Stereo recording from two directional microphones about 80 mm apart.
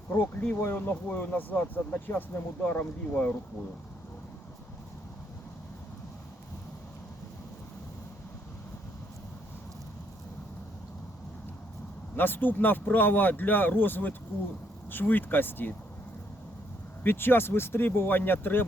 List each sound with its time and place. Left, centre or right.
0.1 s speech: left
12.1 s speech: left
17.0 s speech: left